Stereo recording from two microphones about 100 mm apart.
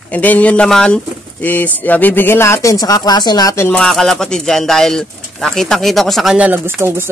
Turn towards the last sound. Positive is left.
turn(degrees=-25)  # may be behind; listen again after turning